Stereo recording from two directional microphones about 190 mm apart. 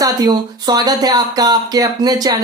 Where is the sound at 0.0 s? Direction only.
20° right (ahead or behind).